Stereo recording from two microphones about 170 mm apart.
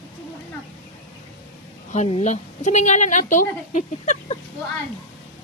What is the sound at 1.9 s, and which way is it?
A woman's voice, 40° left (ahead or behind).